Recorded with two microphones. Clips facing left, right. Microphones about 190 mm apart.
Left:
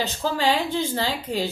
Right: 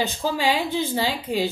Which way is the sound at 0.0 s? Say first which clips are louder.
Even; 10° right (ahead or behind).